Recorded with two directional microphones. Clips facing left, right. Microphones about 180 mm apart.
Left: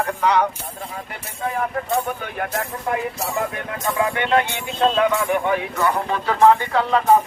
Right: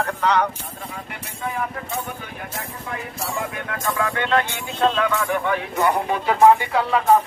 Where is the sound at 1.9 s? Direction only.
60° left (ahead or behind).